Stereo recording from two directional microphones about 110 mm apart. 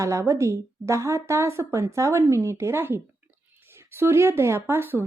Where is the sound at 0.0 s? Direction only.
30° right (ahead or behind).